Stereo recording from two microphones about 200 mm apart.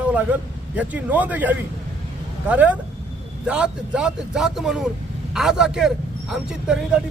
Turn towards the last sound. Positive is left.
turn(degrees=-5)  # may be behind; listen again after turning